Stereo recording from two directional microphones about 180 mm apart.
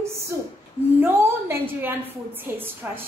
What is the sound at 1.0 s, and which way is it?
Speech, 15° right (ahead or behind).